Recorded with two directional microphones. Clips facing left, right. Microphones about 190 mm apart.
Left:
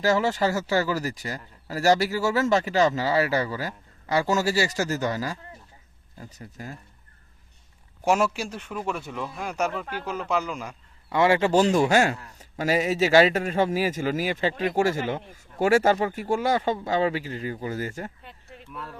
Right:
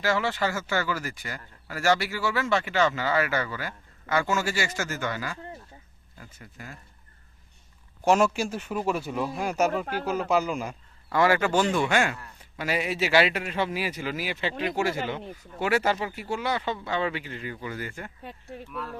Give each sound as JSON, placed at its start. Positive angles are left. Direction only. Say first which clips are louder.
{"t": 0.0, "sound": "speech", "louder": "left 4 dB", "side_deg": 40}
{"t": 8.0, "sound": "speech", "louder": "right 1 dB", "side_deg": 5}
{"t": 9.8, "sound": "speech", "louder": "right 3 dB", "side_deg": -35}
{"t": 10.1, "sound": "speech", "louder": "right 2 dB", "side_deg": -5}
{"t": 11.1, "sound": "a man's voice", "louder": "left 2 dB", "side_deg": 25}